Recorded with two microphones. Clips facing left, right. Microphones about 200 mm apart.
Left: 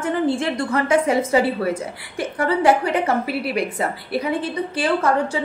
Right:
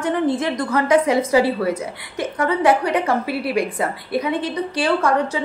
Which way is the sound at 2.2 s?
30° left (ahead or behind).